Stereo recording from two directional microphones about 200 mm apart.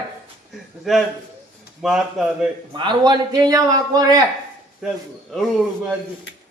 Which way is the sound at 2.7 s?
25° right (ahead or behind).